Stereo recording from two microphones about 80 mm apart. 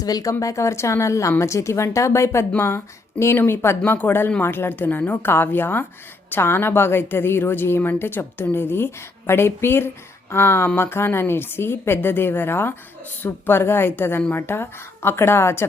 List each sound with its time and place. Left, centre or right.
0.0 s a woman's voice: left